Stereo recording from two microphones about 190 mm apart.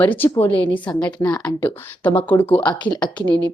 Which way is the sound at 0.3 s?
30° left (ahead or behind).